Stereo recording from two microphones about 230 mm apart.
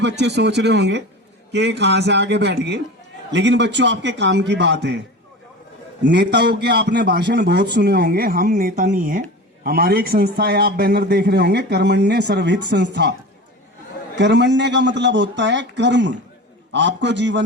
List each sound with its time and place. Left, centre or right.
0.0 s a man's voice: right
6.0 s a man's voice: right
14.2 s a man's voice: right